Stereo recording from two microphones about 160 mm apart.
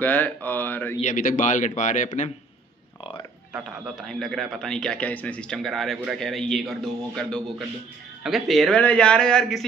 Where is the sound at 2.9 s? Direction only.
30° left (ahead or behind).